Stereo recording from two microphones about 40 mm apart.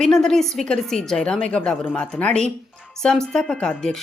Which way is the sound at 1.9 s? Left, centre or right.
Left.